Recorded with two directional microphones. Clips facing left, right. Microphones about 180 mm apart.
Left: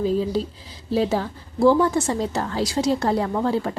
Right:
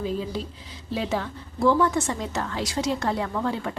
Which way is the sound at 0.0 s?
35° left (ahead or behind).